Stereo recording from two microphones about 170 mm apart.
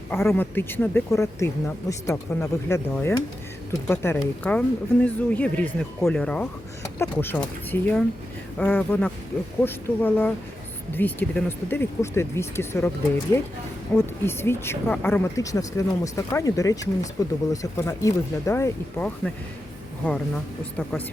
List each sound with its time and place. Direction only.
0.1 s speech: 15° left (ahead or behind)
13.9 s speech: 15° left (ahead or behind)